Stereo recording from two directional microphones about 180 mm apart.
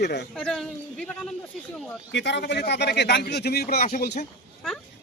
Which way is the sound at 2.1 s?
75° left (ahead or behind).